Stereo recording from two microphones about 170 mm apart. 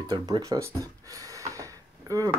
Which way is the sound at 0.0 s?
25° right (ahead or behind).